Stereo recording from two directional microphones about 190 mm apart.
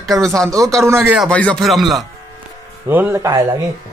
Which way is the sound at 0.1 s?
5° left (ahead or behind).